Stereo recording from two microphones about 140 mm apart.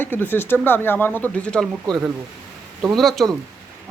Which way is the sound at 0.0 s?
15° left (ahead or behind).